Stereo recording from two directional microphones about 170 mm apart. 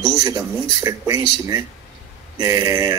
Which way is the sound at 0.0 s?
20° right (ahead or behind).